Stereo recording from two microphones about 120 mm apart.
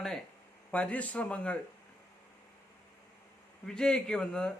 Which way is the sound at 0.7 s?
10° left (ahead or behind).